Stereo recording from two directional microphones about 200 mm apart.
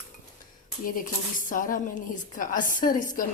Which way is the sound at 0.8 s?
45° left (ahead or behind).